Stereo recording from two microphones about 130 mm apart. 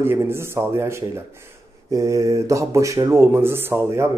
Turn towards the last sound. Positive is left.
turn(degrees=-20)  # may be behind; listen again after turning